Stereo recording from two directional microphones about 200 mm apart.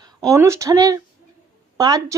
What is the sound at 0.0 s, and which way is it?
Speech, 15° right (ahead or behind).